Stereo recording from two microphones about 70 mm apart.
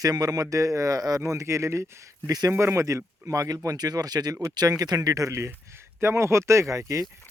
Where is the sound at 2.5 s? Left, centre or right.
Right.